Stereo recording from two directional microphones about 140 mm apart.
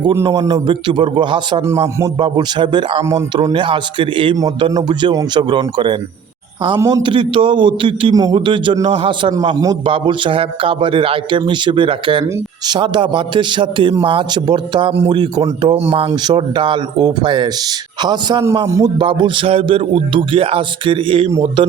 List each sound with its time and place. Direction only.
0.1 s speech: 25° right (ahead or behind)
4.4 s speech: 25° right (ahead or behind)
8.1 s a man's voice: 25° right (ahead or behind)
8.4 s a man's voice: 35° right (ahead or behind)
19.0 s speech: 35° right (ahead or behind)